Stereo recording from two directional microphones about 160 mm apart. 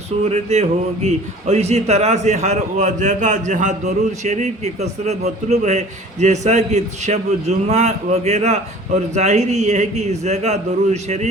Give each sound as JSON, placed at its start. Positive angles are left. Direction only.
{"t": 0.3, "sound": "a man's voice", "side_deg": -45}